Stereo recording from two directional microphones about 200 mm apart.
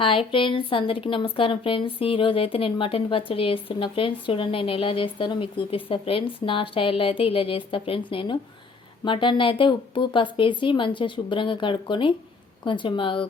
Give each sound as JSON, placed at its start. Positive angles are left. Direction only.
{"t": 0.0, "sound": "speech", "side_deg": 25}